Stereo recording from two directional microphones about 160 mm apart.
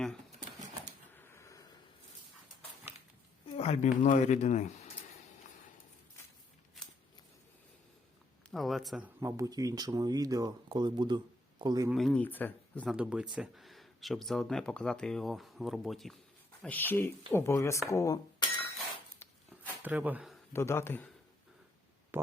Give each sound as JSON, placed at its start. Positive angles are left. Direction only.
{"t": 1.1, "sound": "a sound", "side_deg": 15}
{"t": 3.4, "sound": "speech", "side_deg": 40}
{"t": 8.4, "sound": "speech", "side_deg": 0}
{"t": 9.2, "sound": "speech", "side_deg": -20}
{"t": 11.9, "sound": "speech", "side_deg": 0}
{"t": 12.9, "sound": "speech", "side_deg": -5}
{"t": 16.6, "sound": "speech", "side_deg": 10}
{"t": 19.2, "sound": "a sound", "side_deg": 10}
{"t": 19.8, "sound": "speech", "side_deg": -10}
{"t": 20.5, "sound": "speech", "side_deg": 15}
{"t": 22.1, "sound": "stomach rumble", "side_deg": -15}